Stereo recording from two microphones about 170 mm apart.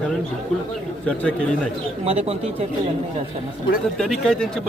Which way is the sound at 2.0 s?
35° right (ahead or behind).